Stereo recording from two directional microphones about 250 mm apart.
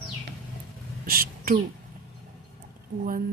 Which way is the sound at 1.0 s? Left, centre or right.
Right.